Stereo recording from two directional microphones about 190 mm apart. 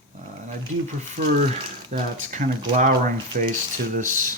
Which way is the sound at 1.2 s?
35° right (ahead or behind).